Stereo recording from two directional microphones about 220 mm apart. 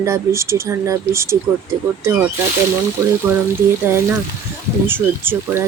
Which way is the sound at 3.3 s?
10° right (ahead or behind).